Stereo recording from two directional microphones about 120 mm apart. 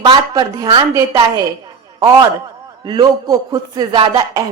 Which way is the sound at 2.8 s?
35° right (ahead or behind).